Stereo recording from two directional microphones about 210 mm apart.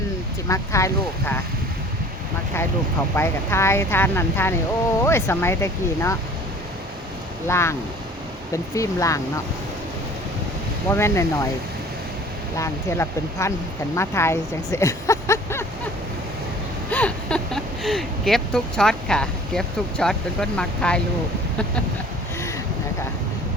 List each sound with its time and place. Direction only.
0.4 s speech: 15° left (ahead or behind)
3.2 s speech: 10° left (ahead or behind)
7.4 s speech: 15° left (ahead or behind)
10.8 s speech: 10° left (ahead or behind)
12.5 s speech: 15° left (ahead or behind)
16.9 s speech: 5° left (ahead or behind)